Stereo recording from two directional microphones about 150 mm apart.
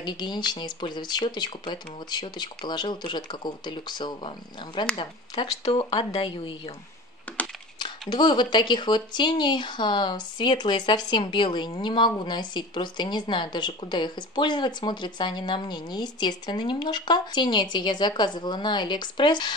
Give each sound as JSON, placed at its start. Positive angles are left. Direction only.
{"t": 0.0, "sound": "speech", "side_deg": 30}
{"t": 7.3, "sound": "computer keyboard", "side_deg": 10}
{"t": 7.8, "sound": "speech", "side_deg": 30}